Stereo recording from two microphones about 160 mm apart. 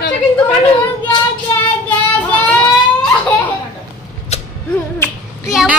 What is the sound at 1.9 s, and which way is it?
Child singing, 10° left (ahead or behind).